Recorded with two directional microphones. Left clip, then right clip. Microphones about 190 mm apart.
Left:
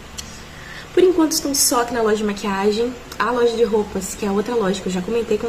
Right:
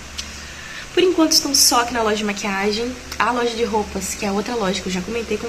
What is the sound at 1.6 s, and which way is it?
A woman's voice, 10° left (ahead or behind).